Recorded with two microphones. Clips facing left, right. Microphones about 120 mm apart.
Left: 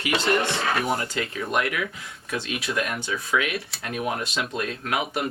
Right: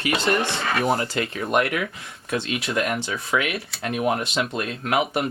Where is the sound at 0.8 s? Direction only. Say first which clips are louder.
Right 4 dB; 25° right (ahead or behind).